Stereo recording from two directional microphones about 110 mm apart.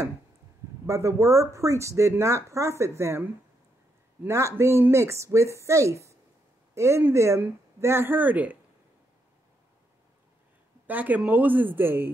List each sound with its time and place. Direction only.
0.8 s speech: 25° right (ahead or behind)
10.9 s speech: 15° right (ahead or behind)